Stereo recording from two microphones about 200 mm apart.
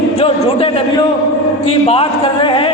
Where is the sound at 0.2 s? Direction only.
30° left (ahead or behind).